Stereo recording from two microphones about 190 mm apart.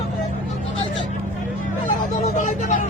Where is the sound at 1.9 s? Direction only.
40° left (ahead or behind).